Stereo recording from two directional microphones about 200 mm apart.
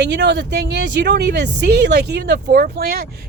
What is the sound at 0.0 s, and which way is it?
Speech, 60° right (ahead or behind).